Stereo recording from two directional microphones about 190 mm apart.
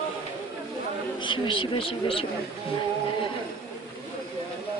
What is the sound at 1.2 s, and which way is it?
Speech, 25° left (ahead or behind).